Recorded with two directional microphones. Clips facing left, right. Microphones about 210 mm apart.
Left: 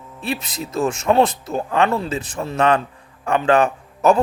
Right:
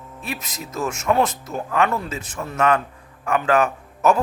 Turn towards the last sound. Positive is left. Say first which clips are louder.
# left 3 dB
turn(degrees=30)  # may be behind; listen again after turning